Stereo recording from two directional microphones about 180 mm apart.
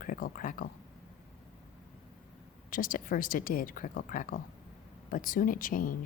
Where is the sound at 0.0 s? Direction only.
50° left (ahead or behind).